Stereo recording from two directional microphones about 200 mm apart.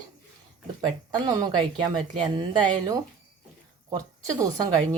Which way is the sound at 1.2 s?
20° right (ahead or behind).